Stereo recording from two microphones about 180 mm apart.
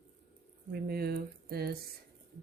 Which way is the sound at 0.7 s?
60° right (ahead or behind).